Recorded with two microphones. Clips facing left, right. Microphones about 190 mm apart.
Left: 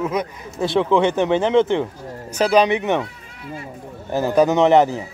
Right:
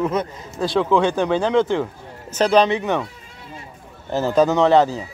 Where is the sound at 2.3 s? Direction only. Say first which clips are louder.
Even; 10° left (ahead or behind).